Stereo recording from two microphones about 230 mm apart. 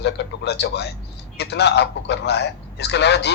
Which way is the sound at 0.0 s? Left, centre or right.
Left.